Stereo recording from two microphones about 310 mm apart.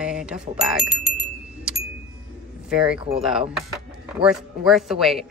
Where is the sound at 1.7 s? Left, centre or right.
Centre.